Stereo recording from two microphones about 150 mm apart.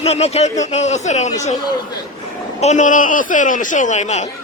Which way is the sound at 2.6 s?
50° left (ahead or behind).